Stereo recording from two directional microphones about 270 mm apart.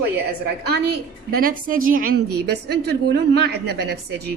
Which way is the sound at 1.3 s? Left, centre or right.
Right.